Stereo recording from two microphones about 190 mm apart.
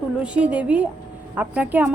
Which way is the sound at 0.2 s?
5° right (ahead or behind).